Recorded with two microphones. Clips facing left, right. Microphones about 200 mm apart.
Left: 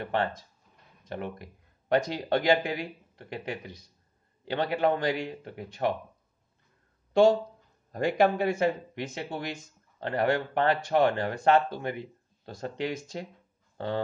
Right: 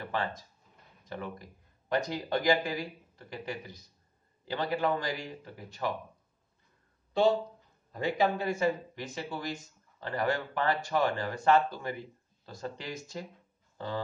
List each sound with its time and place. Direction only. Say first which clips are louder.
0.0 s a sound: left 5 dB; 65° left (ahead or behind)
1.0 s speech: left 4 dB; 60° left (ahead or behind)
8.2 s speech: left 4 dB; 65° left (ahead or behind)